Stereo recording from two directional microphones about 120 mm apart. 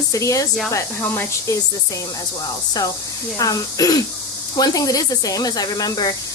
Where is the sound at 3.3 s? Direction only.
30° left (ahead or behind).